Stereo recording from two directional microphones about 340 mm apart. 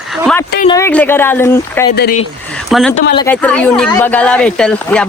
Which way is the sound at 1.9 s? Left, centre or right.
Left.